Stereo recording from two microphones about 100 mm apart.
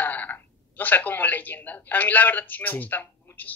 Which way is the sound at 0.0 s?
20° left (ahead or behind).